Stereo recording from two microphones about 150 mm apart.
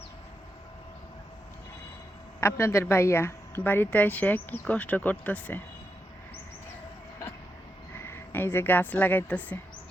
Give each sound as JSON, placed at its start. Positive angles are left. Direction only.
{"t": 2.4, "sound": "speech", "side_deg": 15}
{"t": 8.0, "sound": "speech", "side_deg": 15}